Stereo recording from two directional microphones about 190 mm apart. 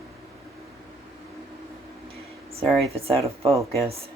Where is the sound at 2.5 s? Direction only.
30° right (ahead or behind).